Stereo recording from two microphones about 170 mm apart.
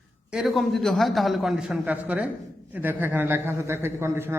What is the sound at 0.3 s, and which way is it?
A man's voice, centre (ahead or behind).